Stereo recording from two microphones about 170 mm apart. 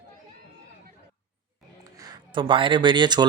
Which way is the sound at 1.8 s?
20° right (ahead or behind).